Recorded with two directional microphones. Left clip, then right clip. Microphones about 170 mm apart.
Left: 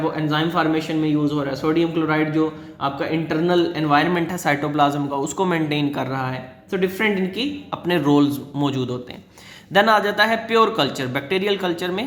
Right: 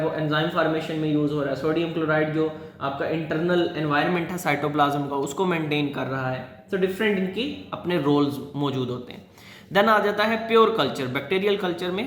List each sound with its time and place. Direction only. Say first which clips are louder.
0.3 s speech: left 4 dB; 45° left (ahead or behind)
4.3 s a man's voice: left 3 dB; 30° left (ahead or behind)